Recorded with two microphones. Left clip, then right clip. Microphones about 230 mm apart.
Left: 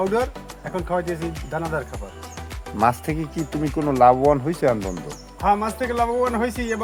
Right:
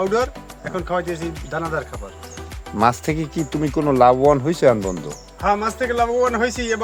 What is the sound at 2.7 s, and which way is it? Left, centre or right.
Speech, right.